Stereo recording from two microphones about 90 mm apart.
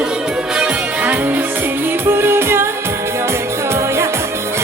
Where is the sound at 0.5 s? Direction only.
15° right (ahead or behind).